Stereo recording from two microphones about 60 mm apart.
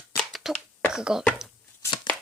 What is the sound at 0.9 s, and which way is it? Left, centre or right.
Speech, centre.